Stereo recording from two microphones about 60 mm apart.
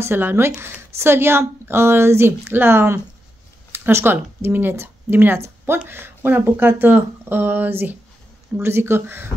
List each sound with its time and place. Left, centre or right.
0.0 s speech: right
8.5 s speech: right